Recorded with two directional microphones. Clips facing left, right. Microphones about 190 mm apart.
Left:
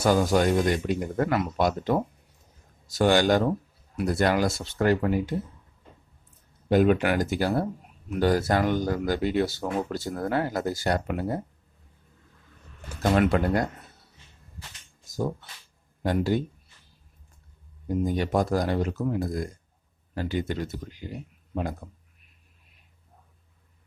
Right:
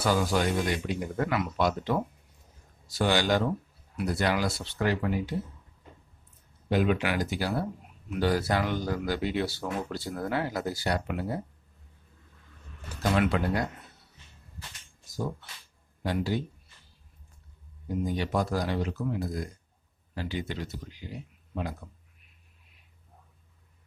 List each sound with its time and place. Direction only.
0.0 s speech: 45° left (ahead or behind)
6.7 s speech: 45° left (ahead or behind)
13.0 s speech: 45° left (ahead or behind)
16.0 s a man's voice: 50° left (ahead or behind)
18.0 s speech: 50° left (ahead or behind)